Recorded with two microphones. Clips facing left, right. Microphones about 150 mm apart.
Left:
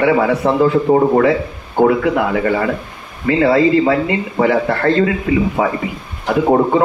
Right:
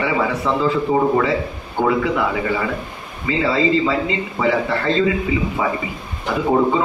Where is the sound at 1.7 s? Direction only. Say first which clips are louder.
Left 5 dB; 55° left (ahead or behind).